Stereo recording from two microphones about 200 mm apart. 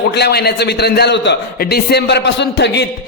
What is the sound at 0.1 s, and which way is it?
A man's voice, 55° left (ahead or behind).